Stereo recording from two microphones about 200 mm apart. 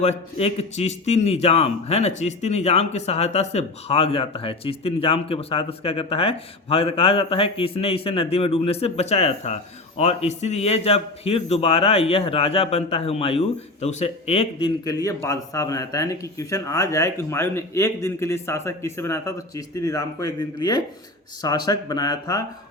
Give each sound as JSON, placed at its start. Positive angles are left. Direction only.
{"t": 0.0, "sound": "a man's voice", "side_deg": 30}
{"t": 14.8, "sound": "a man's voice", "side_deg": 15}